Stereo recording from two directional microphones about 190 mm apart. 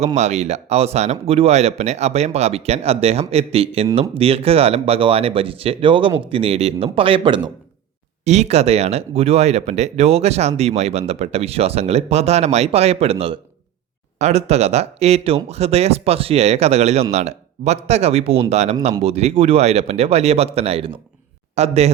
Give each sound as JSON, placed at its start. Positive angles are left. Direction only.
{"t": 0.0, "sound": "speech", "side_deg": -35}
{"t": 8.2, "sound": "a man's voice", "side_deg": -35}